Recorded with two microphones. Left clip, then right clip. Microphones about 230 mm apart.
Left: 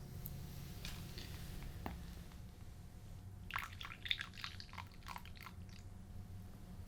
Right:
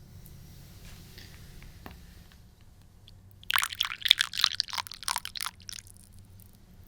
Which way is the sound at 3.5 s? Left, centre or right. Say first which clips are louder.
Right 17 dB; right.